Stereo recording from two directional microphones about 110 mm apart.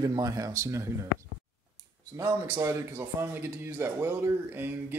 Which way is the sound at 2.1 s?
25° right (ahead or behind).